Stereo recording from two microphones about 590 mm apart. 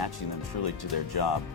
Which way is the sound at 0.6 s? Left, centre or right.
Left.